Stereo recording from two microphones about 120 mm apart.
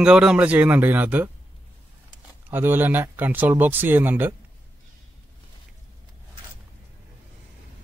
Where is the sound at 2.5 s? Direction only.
15° right (ahead or behind).